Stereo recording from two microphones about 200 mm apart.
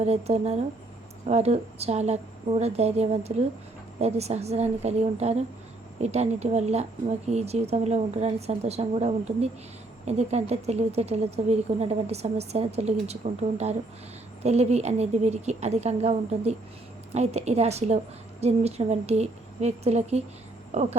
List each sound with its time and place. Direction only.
0.0 s a woman's voice: 30° right (ahead or behind)
14.4 s a woman's voice: 35° right (ahead or behind)